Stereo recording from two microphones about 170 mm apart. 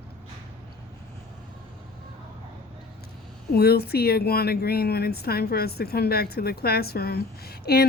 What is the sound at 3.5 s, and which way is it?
Speech, 70° left (ahead or behind).